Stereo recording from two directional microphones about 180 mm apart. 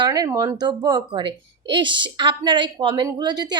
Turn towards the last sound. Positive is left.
turn(degrees=-25)  # may be behind; listen again after turning